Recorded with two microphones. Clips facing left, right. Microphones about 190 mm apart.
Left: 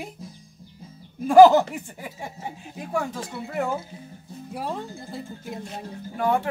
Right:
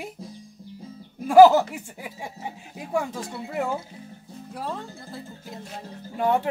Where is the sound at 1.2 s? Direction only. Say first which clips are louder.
Left 1 dB; 5° right (ahead or behind).